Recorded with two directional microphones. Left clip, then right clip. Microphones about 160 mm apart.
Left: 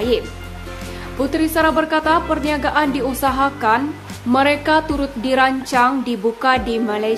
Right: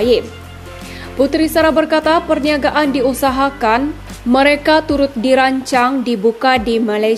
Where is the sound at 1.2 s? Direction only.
25° right (ahead or behind).